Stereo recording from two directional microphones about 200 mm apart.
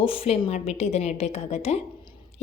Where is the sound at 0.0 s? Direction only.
30° left (ahead or behind).